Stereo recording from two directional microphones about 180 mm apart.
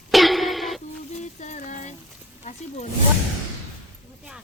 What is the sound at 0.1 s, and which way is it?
Music, centre (ahead or behind).